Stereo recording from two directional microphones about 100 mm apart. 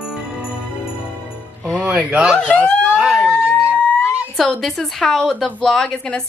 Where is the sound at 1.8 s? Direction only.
15° right (ahead or behind).